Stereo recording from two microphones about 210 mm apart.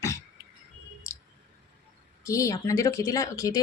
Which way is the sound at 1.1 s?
15° left (ahead or behind).